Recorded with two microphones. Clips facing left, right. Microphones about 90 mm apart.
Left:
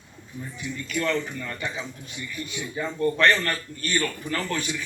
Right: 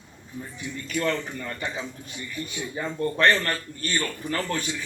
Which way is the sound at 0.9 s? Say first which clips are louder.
Even; 20° right (ahead or behind).